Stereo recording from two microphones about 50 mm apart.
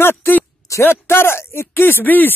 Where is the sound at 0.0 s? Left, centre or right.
Left.